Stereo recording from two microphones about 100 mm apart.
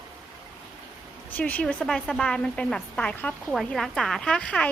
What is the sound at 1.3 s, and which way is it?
A woman's voice, 15° left (ahead or behind).